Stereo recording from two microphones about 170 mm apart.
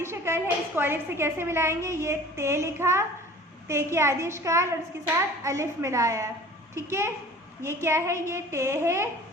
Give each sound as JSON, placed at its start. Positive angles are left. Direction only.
{"t": 0.0, "sound": "a woman's voice", "side_deg": -15}